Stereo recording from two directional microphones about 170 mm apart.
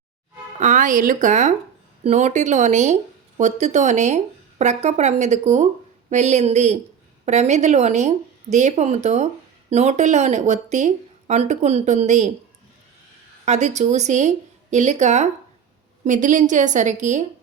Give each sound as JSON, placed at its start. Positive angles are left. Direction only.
{"t": 0.6, "sound": "a woman's voice", "side_deg": -50}
{"t": 13.4, "sound": "speech", "side_deg": -45}